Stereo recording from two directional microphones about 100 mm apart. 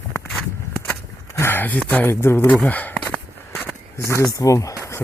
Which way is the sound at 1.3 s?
20° left (ahead or behind).